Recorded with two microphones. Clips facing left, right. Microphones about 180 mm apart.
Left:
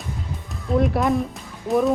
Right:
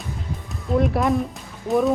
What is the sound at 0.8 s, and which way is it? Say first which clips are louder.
Speech: even; centre (ahead or behind).